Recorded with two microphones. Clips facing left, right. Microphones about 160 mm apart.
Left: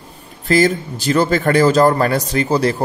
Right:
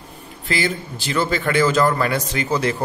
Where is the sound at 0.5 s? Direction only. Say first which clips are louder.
Left 9 dB; 40° left (ahead or behind).